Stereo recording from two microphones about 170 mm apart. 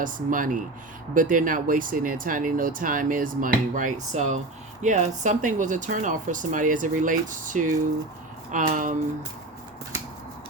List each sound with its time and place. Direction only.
0.0 s speech: 50° right (ahead or behind)